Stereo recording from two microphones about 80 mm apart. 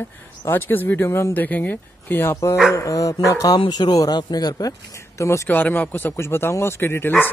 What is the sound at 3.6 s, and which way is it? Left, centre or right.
Speech, left.